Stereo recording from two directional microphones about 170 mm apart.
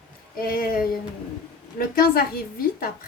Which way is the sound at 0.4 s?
60° left (ahead or behind).